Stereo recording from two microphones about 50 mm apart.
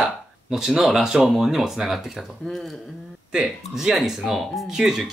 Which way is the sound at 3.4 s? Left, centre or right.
Centre.